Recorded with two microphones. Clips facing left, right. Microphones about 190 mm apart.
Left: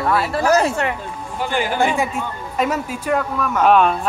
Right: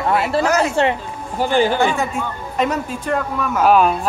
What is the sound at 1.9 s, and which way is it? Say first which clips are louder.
Speech: even; 5° left (ahead or behind).